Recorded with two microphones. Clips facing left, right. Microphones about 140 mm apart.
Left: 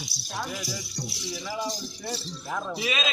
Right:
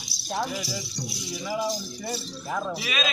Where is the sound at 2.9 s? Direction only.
25° left (ahead or behind).